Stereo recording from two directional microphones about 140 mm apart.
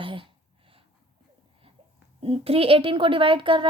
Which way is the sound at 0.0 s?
35° right (ahead or behind).